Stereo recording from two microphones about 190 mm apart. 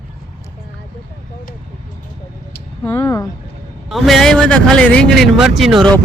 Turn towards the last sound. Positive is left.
turn(degrees=5)  # may be behind; listen again after turning